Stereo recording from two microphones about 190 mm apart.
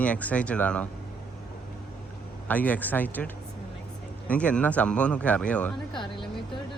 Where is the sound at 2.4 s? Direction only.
10° left (ahead or behind).